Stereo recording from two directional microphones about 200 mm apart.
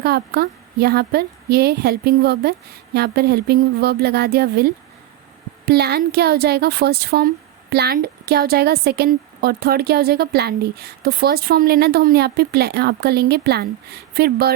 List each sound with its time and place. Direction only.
0.0 s a woman's voice: 50° right (ahead or behind)